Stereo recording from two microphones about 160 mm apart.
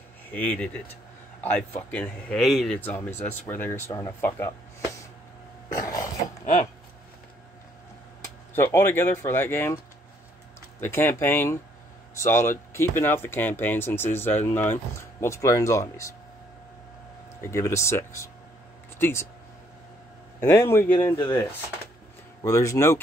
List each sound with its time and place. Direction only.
0.3 s speech: 10° left (ahead or behind)
5.7 s cough: 20° left (ahead or behind)
6.4 s speech: 50° left (ahead or behind)
8.5 s speech: 15° left (ahead or behind)
10.8 s speech: 15° left (ahead or behind)
17.4 s speech: 15° left (ahead or behind)
20.4 s speech: 20° left (ahead or behind)
22.4 s speech: 20° left (ahead or behind)